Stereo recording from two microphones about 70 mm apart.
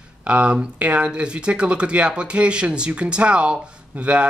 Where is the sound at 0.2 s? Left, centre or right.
Centre.